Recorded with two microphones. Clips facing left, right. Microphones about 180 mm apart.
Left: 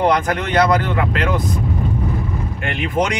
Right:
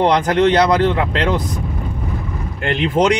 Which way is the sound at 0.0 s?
30° right (ahead or behind).